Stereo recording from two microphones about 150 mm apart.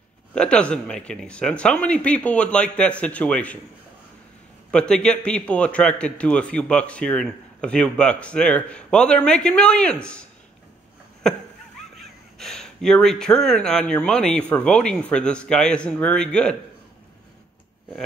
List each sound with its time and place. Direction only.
0.3 s a man's voice: 5° left (ahead or behind)
4.6 s a man's voice: 5° left (ahead or behind)
11.2 s speech: centre (ahead or behind)